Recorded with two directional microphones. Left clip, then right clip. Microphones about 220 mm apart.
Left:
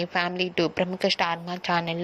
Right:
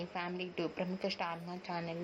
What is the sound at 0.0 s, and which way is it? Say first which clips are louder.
A woman's voice: left 14 dB; 30° left (ahead or behind).